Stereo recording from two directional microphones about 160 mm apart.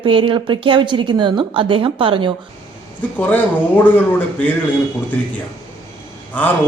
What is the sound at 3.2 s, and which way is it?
Speech, 10° left (ahead or behind).